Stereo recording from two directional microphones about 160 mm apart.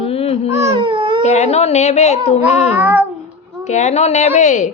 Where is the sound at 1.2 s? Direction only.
45° left (ahead or behind).